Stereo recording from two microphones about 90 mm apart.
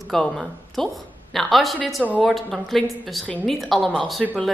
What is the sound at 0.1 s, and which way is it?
A woman's voice, 5° left (ahead or behind).